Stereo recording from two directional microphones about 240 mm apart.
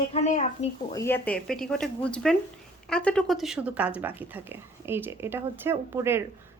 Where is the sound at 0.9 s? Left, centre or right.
Centre.